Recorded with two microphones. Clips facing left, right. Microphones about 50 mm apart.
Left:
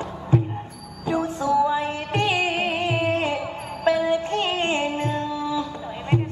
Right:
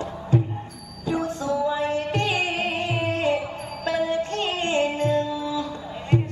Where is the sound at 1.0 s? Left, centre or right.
Left.